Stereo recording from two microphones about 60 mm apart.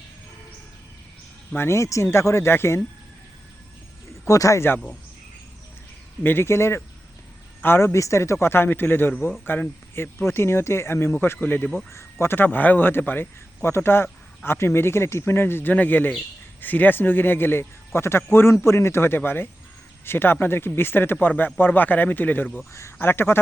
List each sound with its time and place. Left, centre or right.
1.5 s speech: left
4.3 s speech: left
6.2 s speech: left
7.6 s speech: left
7.9 s a man's voice: left
18.5 s a man's voice: left
22.7 s speech: left
23.0 s a man's voice: left